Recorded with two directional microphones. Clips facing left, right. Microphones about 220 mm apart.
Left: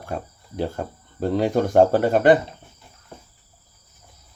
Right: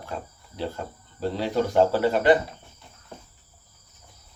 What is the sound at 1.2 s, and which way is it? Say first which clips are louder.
Speech: left 5 dB; 50° left (ahead or behind).